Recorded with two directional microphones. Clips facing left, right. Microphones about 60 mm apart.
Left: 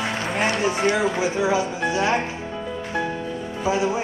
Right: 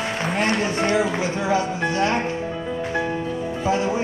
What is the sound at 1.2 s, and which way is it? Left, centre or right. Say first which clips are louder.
Speech: left 1 dB; centre.